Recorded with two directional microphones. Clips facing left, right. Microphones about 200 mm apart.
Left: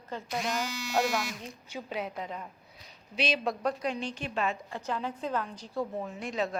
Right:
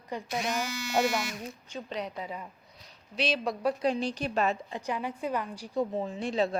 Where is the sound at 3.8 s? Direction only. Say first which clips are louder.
Right 5 dB; 35° right (ahead or behind).